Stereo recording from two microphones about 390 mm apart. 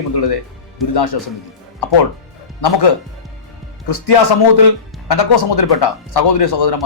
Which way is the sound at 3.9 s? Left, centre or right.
Left.